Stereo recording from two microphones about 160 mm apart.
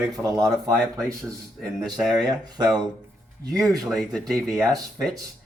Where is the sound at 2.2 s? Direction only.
25° right (ahead or behind).